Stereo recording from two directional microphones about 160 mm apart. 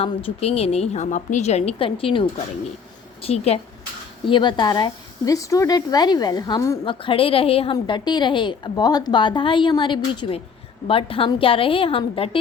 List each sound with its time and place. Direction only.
0.0 s a woman's voice: 40° left (ahead or behind)
4.3 s speech: 30° left (ahead or behind)
6.8 s a woman's voice: 35° left (ahead or behind)